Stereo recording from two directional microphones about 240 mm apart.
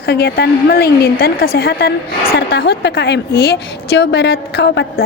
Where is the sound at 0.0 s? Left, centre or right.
Left.